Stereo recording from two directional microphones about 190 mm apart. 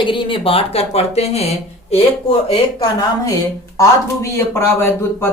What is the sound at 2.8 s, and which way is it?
Speech, 20° left (ahead or behind).